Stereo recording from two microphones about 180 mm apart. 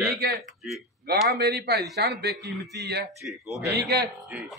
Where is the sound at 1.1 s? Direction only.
60° right (ahead or behind).